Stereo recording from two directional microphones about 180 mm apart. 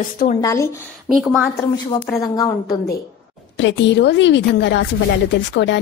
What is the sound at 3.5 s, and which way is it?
A woman's voice, 85° left.